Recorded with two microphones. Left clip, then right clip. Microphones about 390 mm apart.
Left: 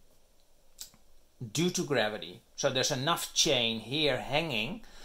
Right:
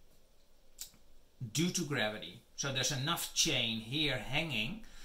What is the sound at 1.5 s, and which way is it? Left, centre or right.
Speech, centre.